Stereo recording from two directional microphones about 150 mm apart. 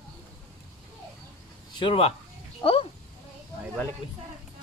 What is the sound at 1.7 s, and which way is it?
Speech, 40° left (ahead or behind).